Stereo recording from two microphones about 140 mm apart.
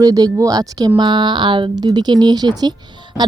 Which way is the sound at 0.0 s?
25° right (ahead or behind).